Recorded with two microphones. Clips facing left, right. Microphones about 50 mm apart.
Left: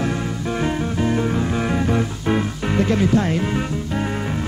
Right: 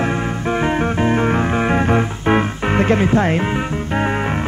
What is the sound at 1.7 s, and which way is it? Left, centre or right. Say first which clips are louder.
Music: right 4 dB; right.